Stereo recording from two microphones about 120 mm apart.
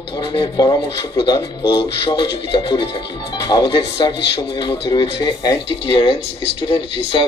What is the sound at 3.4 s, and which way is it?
Speech, 40° left (ahead or behind).